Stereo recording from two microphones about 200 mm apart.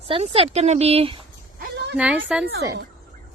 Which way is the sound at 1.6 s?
55° right (ahead or behind).